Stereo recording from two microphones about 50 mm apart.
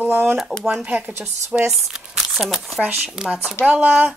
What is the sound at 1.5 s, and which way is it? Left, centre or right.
Speech, centre.